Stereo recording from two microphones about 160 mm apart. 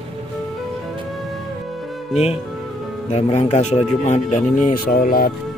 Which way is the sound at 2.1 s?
40° left (ahead or behind).